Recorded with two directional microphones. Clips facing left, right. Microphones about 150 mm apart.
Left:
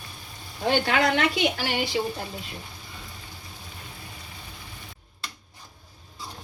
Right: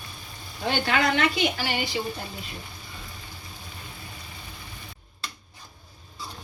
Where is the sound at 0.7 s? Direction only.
55° left (ahead or behind); by 1.9 s 70° left (ahead or behind).